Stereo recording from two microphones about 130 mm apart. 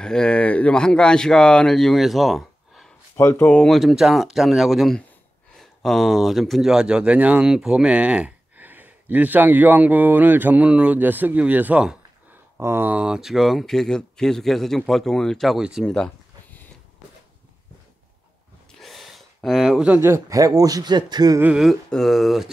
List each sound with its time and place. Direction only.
0.0 s speech: 5° left (ahead or behind)
3.2 s speech: 20° left (ahead or behind)
3.4 s speech: 5° left (ahead or behind)
12.5 s speech: 20° right (ahead or behind); by 16.1 s 5° left (ahead or behind)
18.8 s gasp: centre (ahead or behind)
20.0 s speech: 25° right (ahead or behind)
21.4 s speech: 10° right (ahead or behind)
21.6 s speech: centre (ahead or behind)